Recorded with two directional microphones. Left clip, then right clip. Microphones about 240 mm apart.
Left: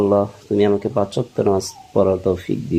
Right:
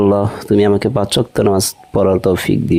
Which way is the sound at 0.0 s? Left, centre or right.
Right.